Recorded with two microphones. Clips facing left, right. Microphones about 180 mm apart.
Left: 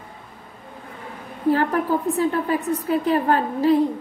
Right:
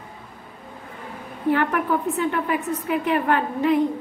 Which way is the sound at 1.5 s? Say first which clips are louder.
Left 1 dB; 35° left (ahead or behind).